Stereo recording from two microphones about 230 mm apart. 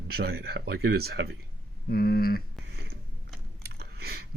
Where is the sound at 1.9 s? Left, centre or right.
Left.